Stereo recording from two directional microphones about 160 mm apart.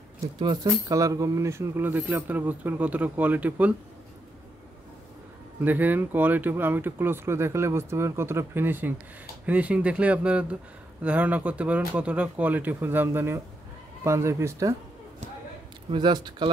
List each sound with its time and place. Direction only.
0.4 s speech: 25° right (ahead or behind); by 3.7 s 10° right (ahead or behind)
5.6 s speech: 10° right (ahead or behind)
15.9 s speech: 25° right (ahead or behind)